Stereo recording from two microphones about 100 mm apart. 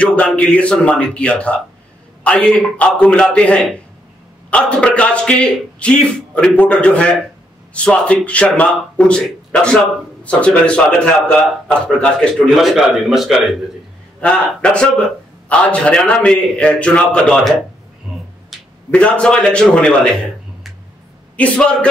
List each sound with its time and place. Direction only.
0.0 s a man's voice: 10° left (ahead or behind)
14.2 s a man's voice: 10° left (ahead or behind)